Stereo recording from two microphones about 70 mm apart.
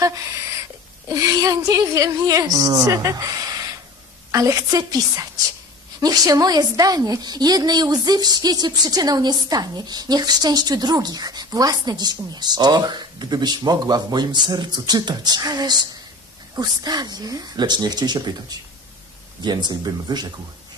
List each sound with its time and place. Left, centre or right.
0.0 s a woman's voice: right
4.3 s a woman's voice: right
19.4 s speech: right